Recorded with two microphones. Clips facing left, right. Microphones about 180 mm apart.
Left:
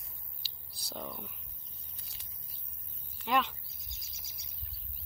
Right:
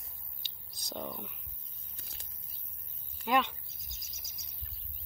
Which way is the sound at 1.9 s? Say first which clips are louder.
Right 7 dB; 50° right (ahead or behind).